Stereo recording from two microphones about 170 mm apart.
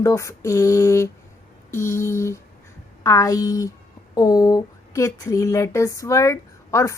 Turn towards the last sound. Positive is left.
turn(degrees=20)  # may be behind; listen again after turning